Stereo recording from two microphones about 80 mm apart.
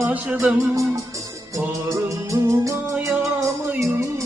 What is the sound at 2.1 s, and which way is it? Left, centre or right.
Music, right.